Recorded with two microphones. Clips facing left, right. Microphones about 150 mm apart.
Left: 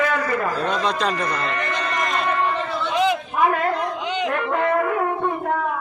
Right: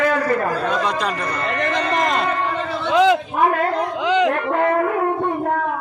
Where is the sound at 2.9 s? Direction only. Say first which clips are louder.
Right 7 dB; 90° right.